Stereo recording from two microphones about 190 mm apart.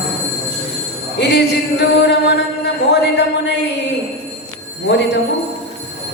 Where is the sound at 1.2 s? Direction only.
65° left (ahead or behind).